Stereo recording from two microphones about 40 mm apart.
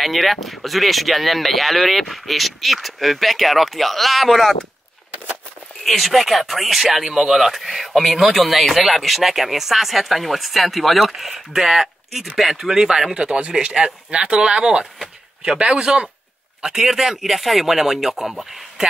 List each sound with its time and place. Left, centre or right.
0.0 s speech: centre
5.9 s speech: centre; by 16.1 s right
16.6 s speech: centre